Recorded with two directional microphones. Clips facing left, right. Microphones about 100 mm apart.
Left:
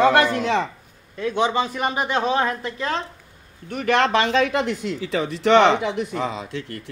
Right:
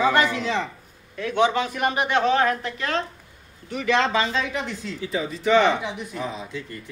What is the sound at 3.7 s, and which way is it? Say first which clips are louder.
A man's voice: left 2 dB; 55° left (ahead or behind).